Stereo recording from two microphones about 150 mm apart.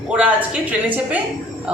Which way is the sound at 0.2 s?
10° right (ahead or behind).